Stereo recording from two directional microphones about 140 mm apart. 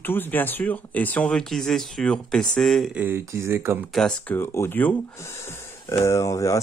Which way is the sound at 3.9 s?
10° left (ahead or behind).